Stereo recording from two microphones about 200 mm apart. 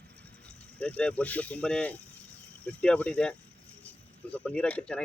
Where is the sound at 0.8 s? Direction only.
5° left (ahead or behind).